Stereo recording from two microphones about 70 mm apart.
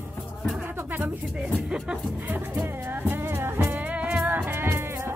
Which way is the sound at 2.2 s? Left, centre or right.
Right.